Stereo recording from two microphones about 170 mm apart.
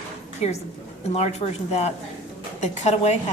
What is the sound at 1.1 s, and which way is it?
A woman's voice, 40° left (ahead or behind).